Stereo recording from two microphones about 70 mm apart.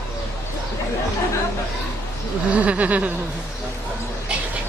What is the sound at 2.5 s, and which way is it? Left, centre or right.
Speech, centre.